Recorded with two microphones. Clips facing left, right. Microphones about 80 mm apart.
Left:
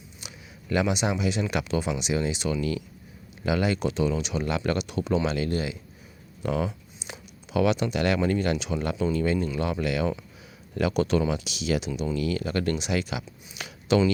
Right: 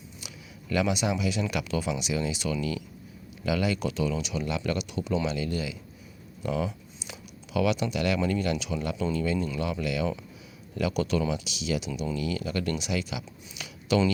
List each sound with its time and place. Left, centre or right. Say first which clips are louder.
0.2 s a sound: left 3 dB; left
0.7 s speech: left 1 dB; left
2.6 s speech: left 3 dB; left
4.4 s speech: left 4 dB; left
8.8 s speech: left 3 dB; left